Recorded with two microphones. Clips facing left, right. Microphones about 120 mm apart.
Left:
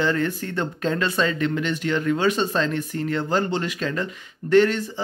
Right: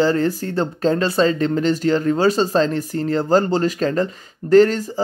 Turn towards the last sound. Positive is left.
turn(degrees=-40)  # may be behind; listen again after turning